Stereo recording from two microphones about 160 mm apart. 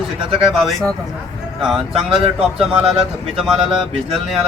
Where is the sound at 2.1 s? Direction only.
35° right (ahead or behind).